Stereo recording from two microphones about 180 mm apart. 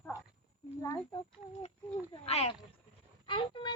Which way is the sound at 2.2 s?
35° left (ahead or behind).